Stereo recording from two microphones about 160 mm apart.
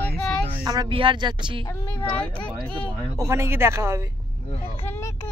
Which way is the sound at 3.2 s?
15° right (ahead or behind).